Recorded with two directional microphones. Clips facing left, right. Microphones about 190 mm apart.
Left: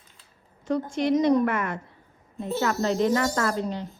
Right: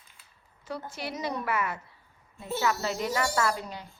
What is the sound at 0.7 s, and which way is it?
A woman's voice, 5° right (ahead or behind).